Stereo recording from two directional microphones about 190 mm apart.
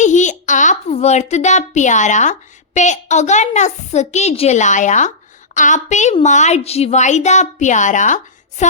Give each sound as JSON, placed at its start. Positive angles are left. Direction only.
{"t": 0.0, "sound": "a child's voice", "side_deg": 40}